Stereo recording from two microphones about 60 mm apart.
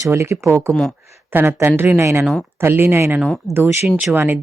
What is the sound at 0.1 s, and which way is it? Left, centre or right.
Speech, right.